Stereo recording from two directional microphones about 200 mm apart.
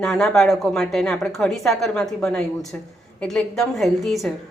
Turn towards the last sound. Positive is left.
turn(degrees=0)  # may be behind; listen again after turning